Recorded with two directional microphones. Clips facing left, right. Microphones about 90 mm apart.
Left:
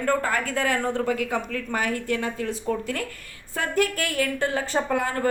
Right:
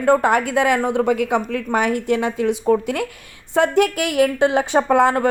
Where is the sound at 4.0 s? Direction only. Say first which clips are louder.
Right 9 dB; 70° right (ahead or behind); by 5.2 s 85° right.